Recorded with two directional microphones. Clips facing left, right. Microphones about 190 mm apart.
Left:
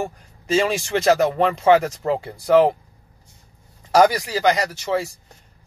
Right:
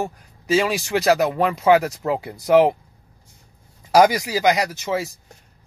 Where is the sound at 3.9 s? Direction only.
10° right (ahead or behind).